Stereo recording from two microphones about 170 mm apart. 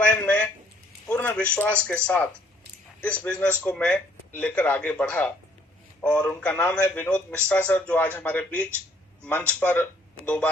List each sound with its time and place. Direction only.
0.0 s a sound: 10° left (ahead or behind)
1.5 s a man's voice: 5° left (ahead or behind)
3.0 s a man's voice: 10° left (ahead or behind)